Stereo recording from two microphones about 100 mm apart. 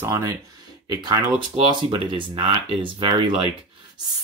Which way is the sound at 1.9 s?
55° right (ahead or behind).